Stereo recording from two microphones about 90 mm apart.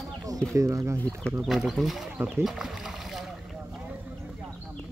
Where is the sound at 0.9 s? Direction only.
15° left (ahead or behind).